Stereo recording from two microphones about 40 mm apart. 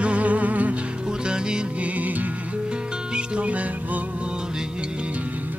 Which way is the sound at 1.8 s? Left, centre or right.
Right.